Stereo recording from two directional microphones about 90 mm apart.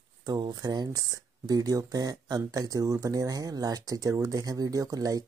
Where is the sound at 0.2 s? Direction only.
50° right (ahead or behind).